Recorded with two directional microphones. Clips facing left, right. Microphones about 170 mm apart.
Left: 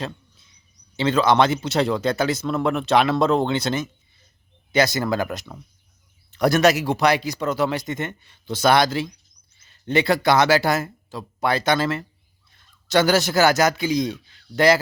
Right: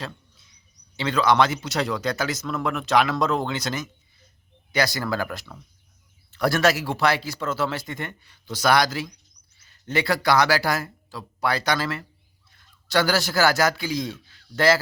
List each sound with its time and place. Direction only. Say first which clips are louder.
0.9 s a man's voice: left 2 dB; 25° left (ahead or behind)